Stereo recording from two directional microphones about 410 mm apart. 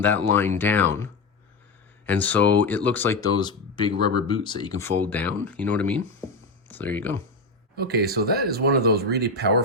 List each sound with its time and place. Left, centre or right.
0.0 s speech: centre
2.0 s speech: centre
7.8 s speech: right